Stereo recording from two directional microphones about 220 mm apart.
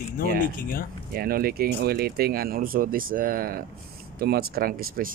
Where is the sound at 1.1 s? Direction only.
45° right (ahead or behind).